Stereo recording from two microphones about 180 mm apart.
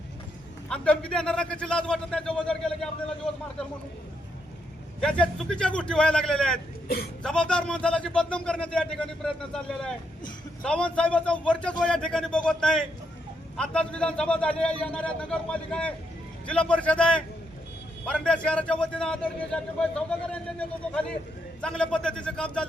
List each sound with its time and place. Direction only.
0.7 s a man's voice: 5° left (ahead or behind)
4.9 s a man's voice: 5° left (ahead or behind)
6.8 s speech: 60° left (ahead or behind)
7.2 s a man's voice: 5° left (ahead or behind)